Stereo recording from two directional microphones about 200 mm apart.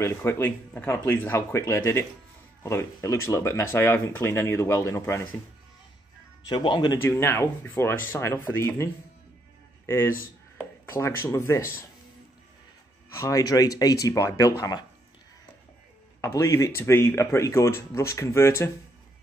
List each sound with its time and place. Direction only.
0.0 s speech: 10° left (ahead or behind)
6.5 s speech: 25° left (ahead or behind)
13.1 s speech: 15° left (ahead or behind)
16.2 s speech: 15° left (ahead or behind)